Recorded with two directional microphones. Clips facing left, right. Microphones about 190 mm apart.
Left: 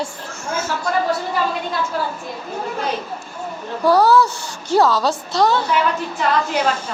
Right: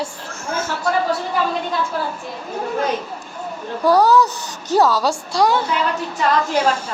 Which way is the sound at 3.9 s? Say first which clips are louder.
Even; 15° right (ahead or behind).